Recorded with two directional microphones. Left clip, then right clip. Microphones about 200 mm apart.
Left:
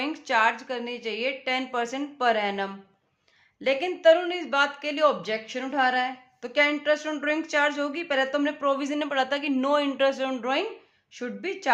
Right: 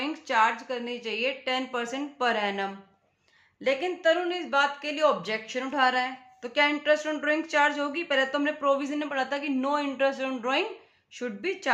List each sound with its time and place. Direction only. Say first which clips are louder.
0.0 s speech: left 1 dB; 20° left (ahead or behind)